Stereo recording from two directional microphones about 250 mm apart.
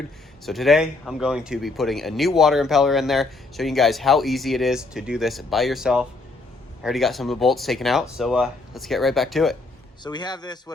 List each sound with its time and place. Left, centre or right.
0.4 s speech: centre
10.0 s a man's voice: centre